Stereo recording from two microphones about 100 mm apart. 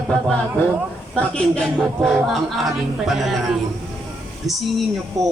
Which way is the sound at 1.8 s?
Centre (ahead or behind).